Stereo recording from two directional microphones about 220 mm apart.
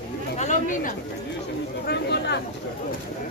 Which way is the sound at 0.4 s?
35° left (ahead or behind).